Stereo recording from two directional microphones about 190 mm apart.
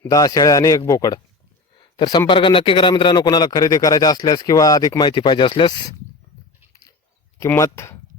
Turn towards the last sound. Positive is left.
turn(degrees=15)  # may be behind; listen again after turning